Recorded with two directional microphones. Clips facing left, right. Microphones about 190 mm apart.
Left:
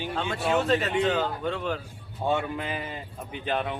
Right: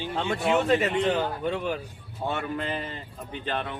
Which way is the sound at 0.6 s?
15° right (ahead or behind).